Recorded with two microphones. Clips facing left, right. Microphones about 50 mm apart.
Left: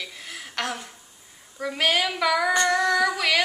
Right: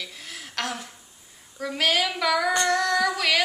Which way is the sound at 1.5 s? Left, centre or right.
Centre.